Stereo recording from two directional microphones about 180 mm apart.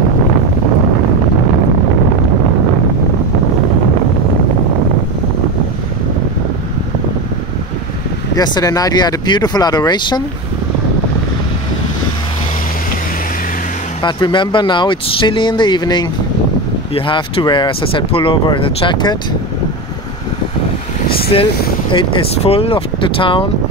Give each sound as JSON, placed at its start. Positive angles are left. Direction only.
{"t": 8.4, "sound": "speech", "side_deg": 20}
{"t": 14.0, "sound": "speech", "side_deg": 25}
{"t": 21.3, "sound": "speech", "side_deg": 30}